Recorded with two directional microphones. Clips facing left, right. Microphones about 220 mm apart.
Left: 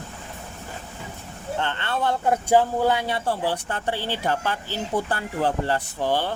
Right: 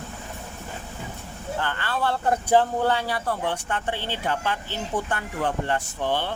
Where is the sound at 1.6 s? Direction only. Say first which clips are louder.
Left 1 dB; 25° left (ahead or behind).